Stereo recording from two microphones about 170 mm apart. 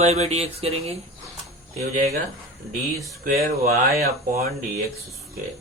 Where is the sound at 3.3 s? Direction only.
55° right (ahead or behind).